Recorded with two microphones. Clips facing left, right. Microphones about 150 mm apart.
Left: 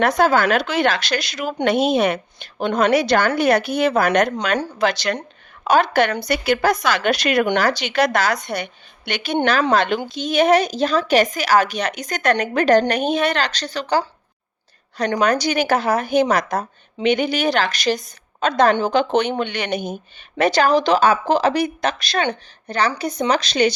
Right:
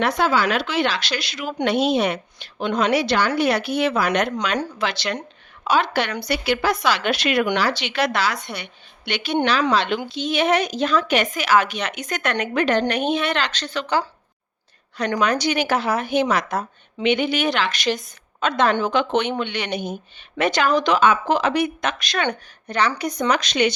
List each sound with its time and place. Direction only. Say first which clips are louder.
0.0 s a woman's voice: left 4 dB; 45° left (ahead or behind)
15.2 s a woman's voice: left 2 dB; 40° left (ahead or behind)
20.4 s a woman's voice: left 3 dB; 35° left (ahead or behind)